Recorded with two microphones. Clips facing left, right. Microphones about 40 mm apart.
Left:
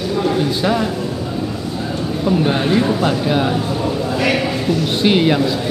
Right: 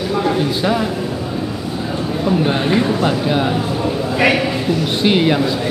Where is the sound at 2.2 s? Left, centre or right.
Centre.